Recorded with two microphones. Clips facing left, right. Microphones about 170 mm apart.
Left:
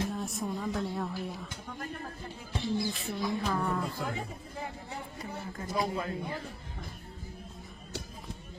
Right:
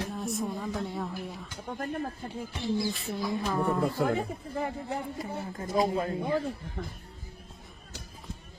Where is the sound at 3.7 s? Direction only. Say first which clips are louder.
Right 8 dB; 55° right (ahead or behind).